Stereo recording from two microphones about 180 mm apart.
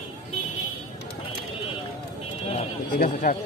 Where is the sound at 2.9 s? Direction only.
50° left (ahead or behind).